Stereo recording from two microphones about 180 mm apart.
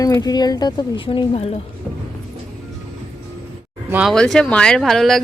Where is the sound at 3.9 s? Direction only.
Centre (ahead or behind).